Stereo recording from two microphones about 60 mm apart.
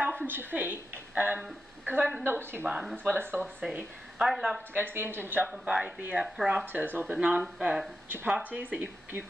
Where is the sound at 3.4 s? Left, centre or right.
Right.